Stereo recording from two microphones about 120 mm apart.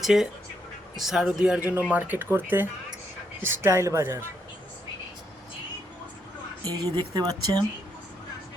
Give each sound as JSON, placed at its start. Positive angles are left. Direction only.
{"t": 0.0, "sound": "a man's voice", "side_deg": -5}
{"t": 6.9, "sound": "speech", "side_deg": -35}